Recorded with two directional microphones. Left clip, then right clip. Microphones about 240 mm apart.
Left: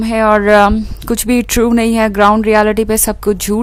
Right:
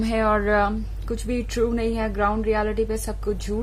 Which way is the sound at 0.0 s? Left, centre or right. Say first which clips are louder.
Left 11 dB; left.